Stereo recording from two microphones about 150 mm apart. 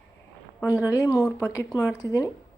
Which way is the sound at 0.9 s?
20° left (ahead or behind).